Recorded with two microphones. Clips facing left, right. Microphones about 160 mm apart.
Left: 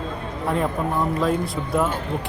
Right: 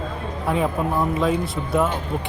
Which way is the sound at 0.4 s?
Centre (ahead or behind).